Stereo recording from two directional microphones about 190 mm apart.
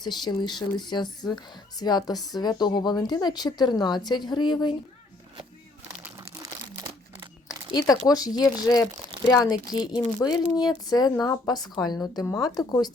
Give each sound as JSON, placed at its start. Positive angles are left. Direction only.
{"t": 0.0, "sound": "a woman's voice", "side_deg": 20}
{"t": 7.7, "sound": "a woman's voice", "side_deg": 20}